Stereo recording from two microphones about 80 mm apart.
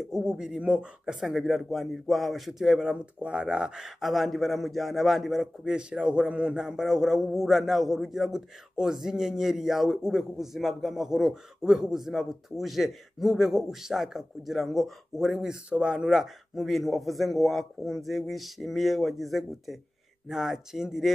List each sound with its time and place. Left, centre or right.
0.1 s a man's voice: centre